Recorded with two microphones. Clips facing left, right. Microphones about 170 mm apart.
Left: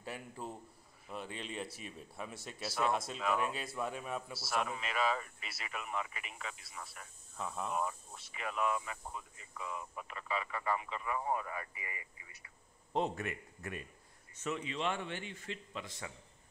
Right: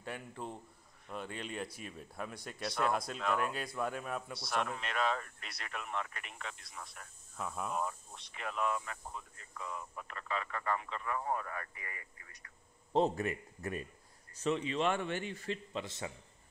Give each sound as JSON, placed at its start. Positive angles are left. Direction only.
{"t": 0.0, "sound": "a man's voice", "side_deg": 5}
{"t": 12.9, "sound": "a man's voice", "side_deg": -35}
{"t": 14.8, "sound": "a man's voice", "side_deg": -50}